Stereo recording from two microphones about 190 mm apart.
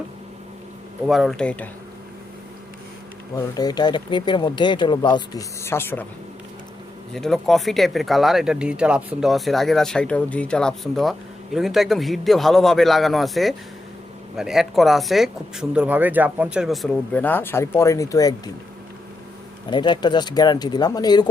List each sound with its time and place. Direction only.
1.0 s speech: centre (ahead or behind)
3.3 s speech: 20° left (ahead or behind)
7.1 s speech: centre (ahead or behind); by 18.5 s 20° left (ahead or behind)
19.7 s speech: 25° left (ahead or behind)